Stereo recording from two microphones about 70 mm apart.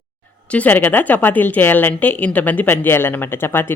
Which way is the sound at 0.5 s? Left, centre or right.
Left.